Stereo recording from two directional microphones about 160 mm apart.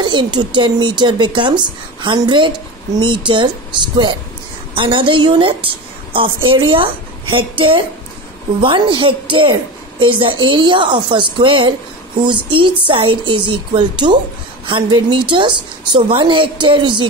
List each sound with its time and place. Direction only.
0.0 s speech: 30° right (ahead or behind)
4.7 s speech: 30° right (ahead or behind)